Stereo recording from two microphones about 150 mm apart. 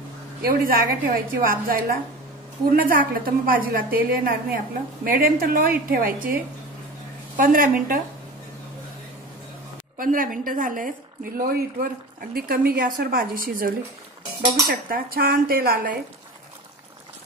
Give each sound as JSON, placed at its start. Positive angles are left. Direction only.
{"t": 0.4, "sound": "a woman's voice", "side_deg": -80}
{"t": 9.9, "sound": "a woman's voice", "side_deg": -65}
{"t": 14.9, "sound": "a woman's voice", "side_deg": -80}